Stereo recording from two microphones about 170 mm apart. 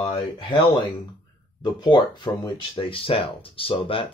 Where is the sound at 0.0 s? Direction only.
30° left (ahead or behind).